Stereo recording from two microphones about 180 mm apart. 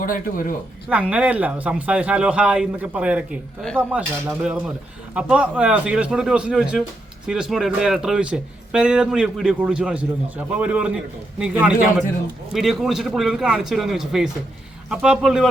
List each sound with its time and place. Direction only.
0.0 s speech: 50° left (ahead or behind)
0.9 s a man's voice: 5° right (ahead or behind)